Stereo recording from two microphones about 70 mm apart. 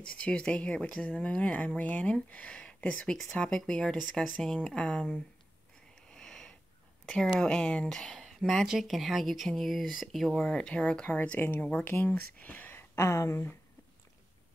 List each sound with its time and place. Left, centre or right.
0.0 s speech: centre
4.6 s speech: centre
6.0 s sniff: centre
7.3 s speech: centre; by 13.5 s left